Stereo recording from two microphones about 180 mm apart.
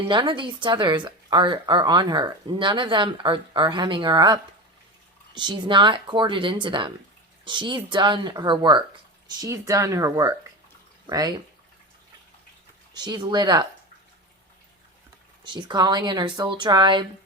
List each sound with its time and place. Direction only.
0.1 s speech: 25° right (ahead or behind)
12.9 s speech: 25° right (ahead or behind)
15.4 s speech: 25° right (ahead or behind)